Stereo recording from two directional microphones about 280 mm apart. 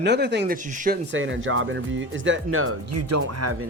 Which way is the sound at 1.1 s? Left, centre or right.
Right.